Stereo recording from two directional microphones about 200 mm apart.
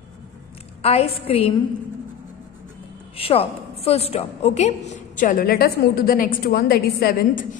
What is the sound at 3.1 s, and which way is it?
A woman's voice, 30° left (ahead or behind).